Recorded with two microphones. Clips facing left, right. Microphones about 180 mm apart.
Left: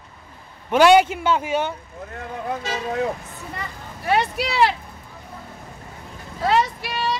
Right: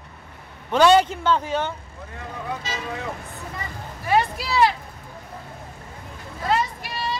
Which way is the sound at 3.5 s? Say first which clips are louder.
Even; 70° left (ahead or behind).